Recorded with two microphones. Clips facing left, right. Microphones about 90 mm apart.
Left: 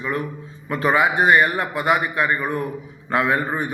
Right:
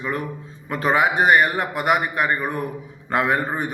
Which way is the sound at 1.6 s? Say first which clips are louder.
Even; 20° right (ahead or behind).